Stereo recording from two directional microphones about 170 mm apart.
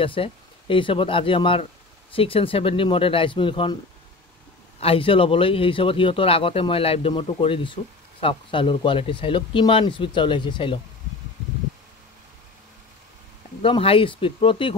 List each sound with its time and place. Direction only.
0.0 s speech: 30° left (ahead or behind)
4.7 s speech: 35° left (ahead or behind)
13.6 s speech: 35° left (ahead or behind)